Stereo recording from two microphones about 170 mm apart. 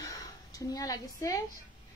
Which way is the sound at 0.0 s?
20° left (ahead or behind).